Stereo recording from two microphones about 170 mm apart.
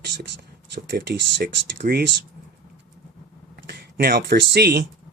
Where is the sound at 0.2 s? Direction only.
80° right.